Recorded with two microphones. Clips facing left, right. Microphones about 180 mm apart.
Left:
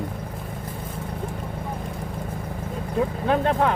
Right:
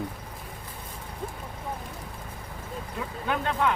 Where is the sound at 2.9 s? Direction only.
35° left (ahead or behind).